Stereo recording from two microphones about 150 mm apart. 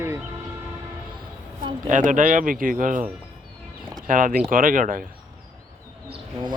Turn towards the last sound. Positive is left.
turn(degrees=-35)  # may be behind; listen again after turning